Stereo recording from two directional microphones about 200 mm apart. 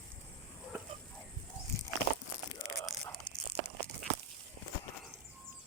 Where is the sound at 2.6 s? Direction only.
20° left (ahead or behind).